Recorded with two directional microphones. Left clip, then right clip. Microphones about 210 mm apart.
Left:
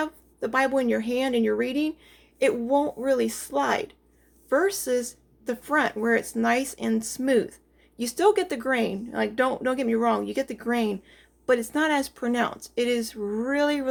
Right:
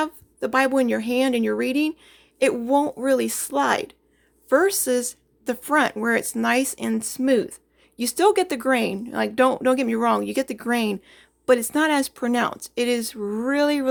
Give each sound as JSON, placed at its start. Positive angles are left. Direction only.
{"t": 0.0, "sound": "speech", "side_deg": -35}